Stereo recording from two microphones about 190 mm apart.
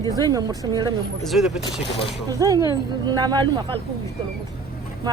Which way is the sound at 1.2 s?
Centre (ahead or behind).